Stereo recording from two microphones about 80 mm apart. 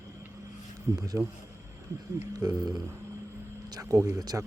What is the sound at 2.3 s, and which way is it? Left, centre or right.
Speech, right.